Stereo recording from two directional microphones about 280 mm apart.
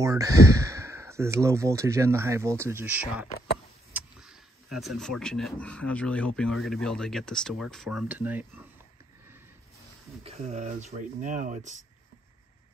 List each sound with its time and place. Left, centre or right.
0.0 s speech: centre
10.2 s speech: right